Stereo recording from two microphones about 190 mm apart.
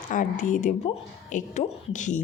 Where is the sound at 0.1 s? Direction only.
40° left (ahead or behind).